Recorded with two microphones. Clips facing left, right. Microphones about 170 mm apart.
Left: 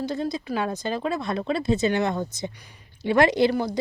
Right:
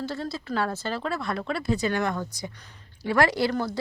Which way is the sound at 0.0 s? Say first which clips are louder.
Left 4 dB; 15° left (ahead or behind).